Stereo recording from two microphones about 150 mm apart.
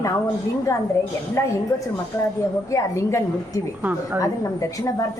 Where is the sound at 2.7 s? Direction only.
20° left (ahead or behind).